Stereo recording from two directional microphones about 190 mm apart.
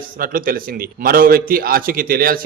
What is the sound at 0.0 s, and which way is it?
A man's voice, 50° right (ahead or behind).